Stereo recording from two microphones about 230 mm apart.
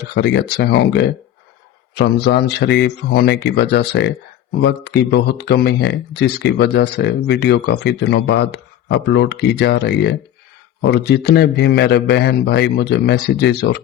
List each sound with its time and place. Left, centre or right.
0.1 s speech: left